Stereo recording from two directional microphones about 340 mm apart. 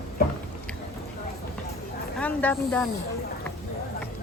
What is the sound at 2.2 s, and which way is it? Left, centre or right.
Speech, centre.